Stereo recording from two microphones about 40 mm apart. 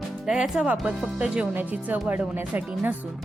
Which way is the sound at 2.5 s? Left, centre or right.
Right.